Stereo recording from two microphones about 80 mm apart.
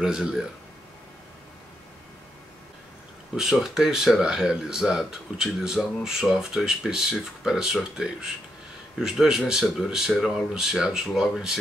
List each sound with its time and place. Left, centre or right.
0.0 s speech: centre
3.3 s speech: centre